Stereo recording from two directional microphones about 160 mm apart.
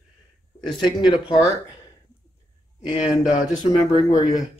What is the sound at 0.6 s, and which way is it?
Speech, 30° left (ahead or behind).